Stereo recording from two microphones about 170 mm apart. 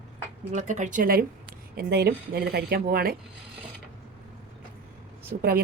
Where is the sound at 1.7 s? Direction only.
65° right (ahead or behind).